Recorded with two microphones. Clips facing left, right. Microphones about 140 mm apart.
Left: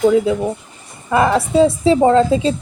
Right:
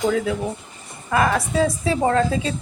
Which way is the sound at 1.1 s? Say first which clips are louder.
Left 6 dB; 25° left (ahead or behind).